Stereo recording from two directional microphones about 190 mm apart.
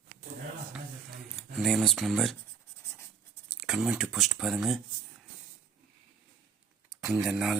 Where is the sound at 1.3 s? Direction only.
Centre (ahead or behind).